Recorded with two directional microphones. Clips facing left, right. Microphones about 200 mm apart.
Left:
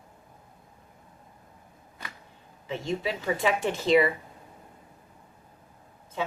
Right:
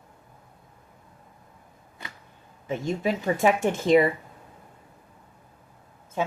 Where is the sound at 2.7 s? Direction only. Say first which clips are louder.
Right 4 dB; 45° right (ahead or behind).